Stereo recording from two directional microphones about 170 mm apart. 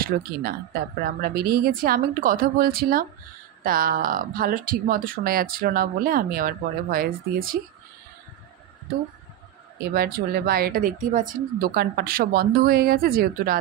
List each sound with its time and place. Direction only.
0.1 s speech: 55° right (ahead or behind)
9.8 s speech: 60° right (ahead or behind)